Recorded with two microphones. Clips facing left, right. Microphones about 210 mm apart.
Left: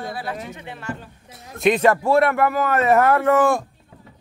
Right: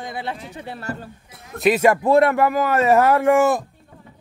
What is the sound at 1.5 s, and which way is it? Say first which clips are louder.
A man's voice: right 1 dB; 5° right (ahead or behind).